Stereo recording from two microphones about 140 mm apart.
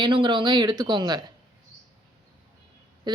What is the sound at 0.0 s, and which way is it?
A woman's voice, 35° right (ahead or behind).